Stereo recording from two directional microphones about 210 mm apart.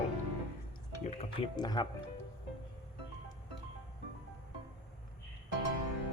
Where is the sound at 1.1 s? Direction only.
25° left (ahead or behind).